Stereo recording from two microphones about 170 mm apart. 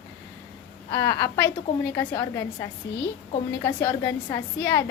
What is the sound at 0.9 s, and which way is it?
A woman's voice, 20° left (ahead or behind).